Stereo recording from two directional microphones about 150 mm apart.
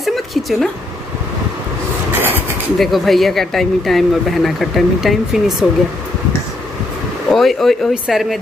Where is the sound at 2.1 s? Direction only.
15° right (ahead or behind).